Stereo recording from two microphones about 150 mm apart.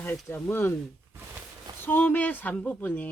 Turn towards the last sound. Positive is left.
turn(degrees=10)  # may be behind; listen again after turning